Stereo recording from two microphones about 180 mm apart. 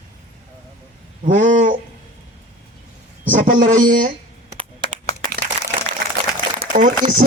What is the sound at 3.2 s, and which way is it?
Speech, 45° right (ahead or behind).